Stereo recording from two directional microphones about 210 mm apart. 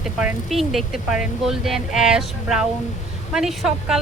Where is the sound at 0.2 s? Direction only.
5° right (ahead or behind).